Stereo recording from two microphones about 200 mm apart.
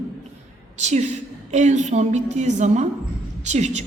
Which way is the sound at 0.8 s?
35° right (ahead or behind).